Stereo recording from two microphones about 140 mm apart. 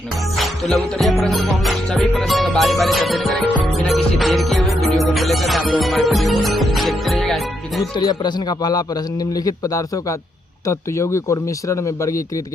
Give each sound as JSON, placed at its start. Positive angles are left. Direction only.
{"t": 0.3, "sound": "music", "side_deg": 0}
{"t": 7.8, "sound": "speech", "side_deg": 30}